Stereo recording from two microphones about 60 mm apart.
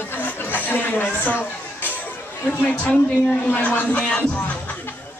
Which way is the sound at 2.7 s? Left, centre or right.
Centre.